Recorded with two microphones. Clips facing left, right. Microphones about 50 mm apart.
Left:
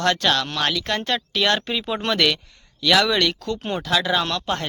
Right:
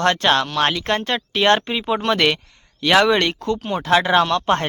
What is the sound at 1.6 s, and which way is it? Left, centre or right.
Speech, right.